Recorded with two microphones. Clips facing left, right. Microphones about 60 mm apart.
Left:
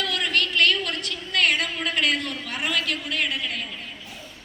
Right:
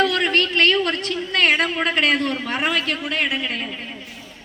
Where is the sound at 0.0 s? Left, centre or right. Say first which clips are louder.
Right 6 dB; right.